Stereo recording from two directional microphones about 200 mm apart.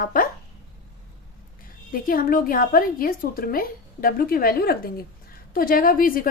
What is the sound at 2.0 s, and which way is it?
Speech, 45° left (ahead or behind).